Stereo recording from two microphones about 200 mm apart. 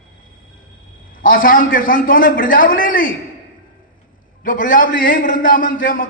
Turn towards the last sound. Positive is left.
turn(degrees=45)  # may be behind; listen again after turning